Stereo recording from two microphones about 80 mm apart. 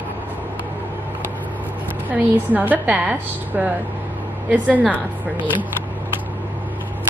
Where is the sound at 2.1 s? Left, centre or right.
Right.